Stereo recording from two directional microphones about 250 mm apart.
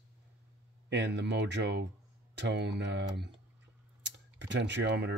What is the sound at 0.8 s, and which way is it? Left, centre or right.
Speech, right.